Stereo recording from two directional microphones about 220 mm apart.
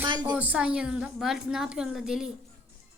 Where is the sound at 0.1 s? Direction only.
20° right (ahead or behind).